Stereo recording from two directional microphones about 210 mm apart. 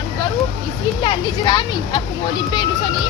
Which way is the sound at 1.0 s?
20° left (ahead or behind).